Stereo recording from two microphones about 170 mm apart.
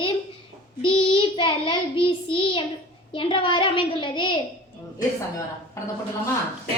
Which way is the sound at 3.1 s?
30° left (ahead or behind).